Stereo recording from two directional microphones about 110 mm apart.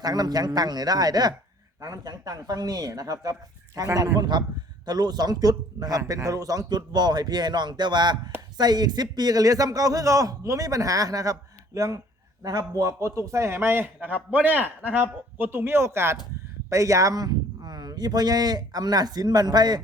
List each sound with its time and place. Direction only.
0.0 s a man's voice: 35° right (ahead or behind)